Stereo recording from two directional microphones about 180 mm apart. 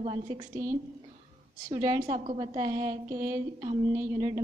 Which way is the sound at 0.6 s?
50° right (ahead or behind).